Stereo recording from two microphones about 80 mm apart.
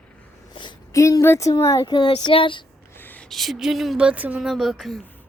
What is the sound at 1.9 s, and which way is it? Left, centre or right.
Child singing, left.